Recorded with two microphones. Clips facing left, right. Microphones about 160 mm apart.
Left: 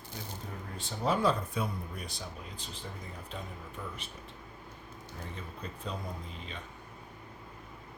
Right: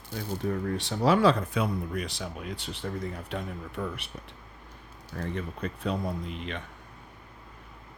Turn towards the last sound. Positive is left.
turn(degrees=-70)  # may be behind; listen again after turning